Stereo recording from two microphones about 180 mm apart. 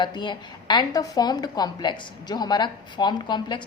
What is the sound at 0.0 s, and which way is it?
A woman's voice, 25° left (ahead or behind).